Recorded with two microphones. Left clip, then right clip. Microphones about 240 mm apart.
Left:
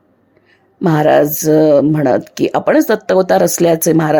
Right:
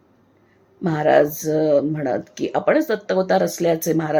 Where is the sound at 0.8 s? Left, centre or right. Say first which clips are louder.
Left 6 dB; left.